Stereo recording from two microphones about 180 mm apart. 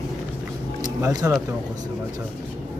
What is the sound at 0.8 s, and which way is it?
Music, 20° right (ahead or behind).